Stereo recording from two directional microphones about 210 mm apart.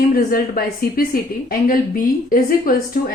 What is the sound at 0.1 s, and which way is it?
Speech, 45° left (ahead or behind).